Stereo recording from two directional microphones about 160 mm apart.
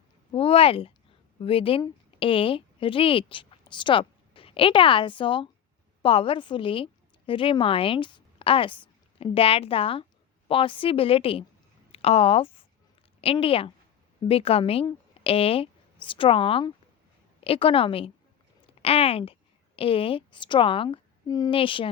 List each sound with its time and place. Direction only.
0.3 s a woman's voice: 35° left (ahead or behind)